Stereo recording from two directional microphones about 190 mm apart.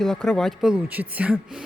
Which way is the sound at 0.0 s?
Centre (ahead or behind).